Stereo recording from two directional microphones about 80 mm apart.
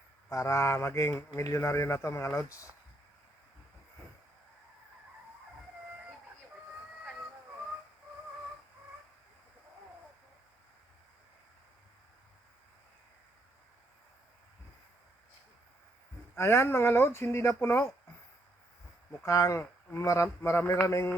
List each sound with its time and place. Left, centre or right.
0.3 s speech: left
16.4 s speech: left
19.2 s speech: left